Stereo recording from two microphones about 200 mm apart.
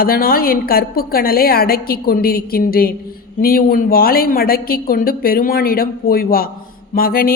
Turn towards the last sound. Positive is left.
turn(degrees=45)  # may be behind; listen again after turning